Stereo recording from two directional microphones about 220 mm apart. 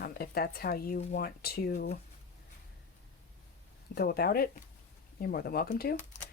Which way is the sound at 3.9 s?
45° left (ahead or behind).